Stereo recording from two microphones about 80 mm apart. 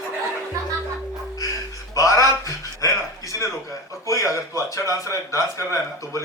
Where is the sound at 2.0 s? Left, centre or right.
Left.